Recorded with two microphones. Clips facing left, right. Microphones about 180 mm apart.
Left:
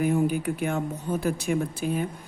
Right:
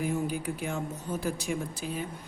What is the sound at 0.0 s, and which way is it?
Speech, 60° left (ahead or behind).